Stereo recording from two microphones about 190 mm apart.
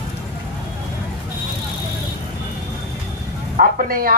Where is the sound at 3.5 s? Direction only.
50° right (ahead or behind).